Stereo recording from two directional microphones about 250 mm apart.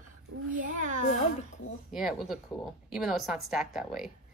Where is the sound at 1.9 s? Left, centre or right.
Centre.